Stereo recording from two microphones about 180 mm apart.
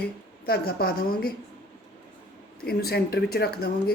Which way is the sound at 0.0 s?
60° left (ahead or behind).